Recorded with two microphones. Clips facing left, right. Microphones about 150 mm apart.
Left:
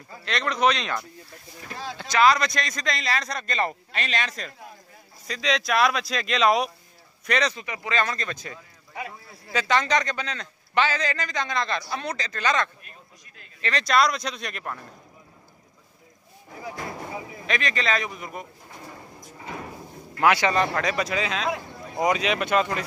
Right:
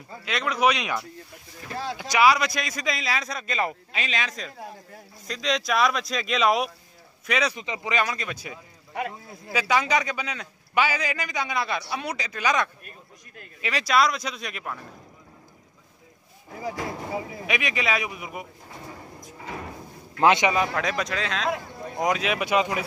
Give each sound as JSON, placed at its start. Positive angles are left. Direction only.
{"t": 0.2, "sound": "a man's voice", "side_deg": -5}
{"t": 7.5, "sound": "a man's voice", "side_deg": -20}
{"t": 17.5, "sound": "a man's voice", "side_deg": -10}
{"t": 20.2, "sound": "a man's voice", "side_deg": -25}
{"t": 20.4, "sound": "a man's voice", "side_deg": -5}